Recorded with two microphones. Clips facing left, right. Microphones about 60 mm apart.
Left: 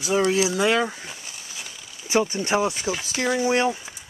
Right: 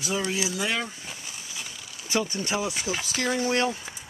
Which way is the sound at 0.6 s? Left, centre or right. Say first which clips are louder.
Left 9 dB; left.